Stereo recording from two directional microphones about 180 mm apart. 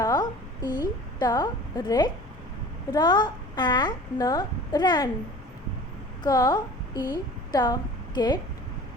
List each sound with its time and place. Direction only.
0.0 s a sound: 20° left (ahead or behind)
2.9 s a child's voice: 25° left (ahead or behind)
6.2 s a woman's voice: 20° left (ahead or behind)